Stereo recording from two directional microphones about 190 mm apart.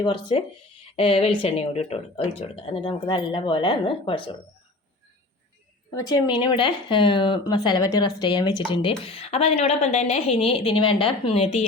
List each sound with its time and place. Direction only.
0.0 s speech: 25° left (ahead or behind)
5.9 s speech: 20° left (ahead or behind)